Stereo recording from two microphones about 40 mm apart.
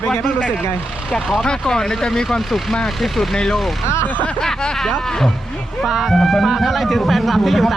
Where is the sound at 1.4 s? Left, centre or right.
Centre.